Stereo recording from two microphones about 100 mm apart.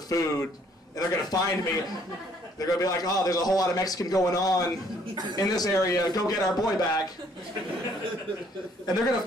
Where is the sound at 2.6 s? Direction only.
35° left (ahead or behind).